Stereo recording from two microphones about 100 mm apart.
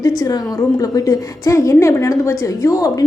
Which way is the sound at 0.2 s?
40° left (ahead or behind).